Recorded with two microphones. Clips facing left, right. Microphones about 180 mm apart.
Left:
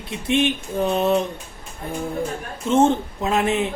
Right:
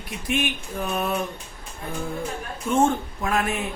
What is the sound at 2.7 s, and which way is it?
A man's voice, 20° left (ahead or behind).